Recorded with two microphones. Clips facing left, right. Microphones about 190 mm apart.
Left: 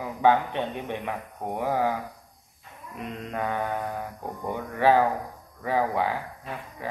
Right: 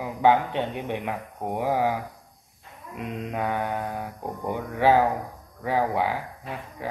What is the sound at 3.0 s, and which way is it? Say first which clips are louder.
Speech: right 2 dB; 10° right (ahead or behind).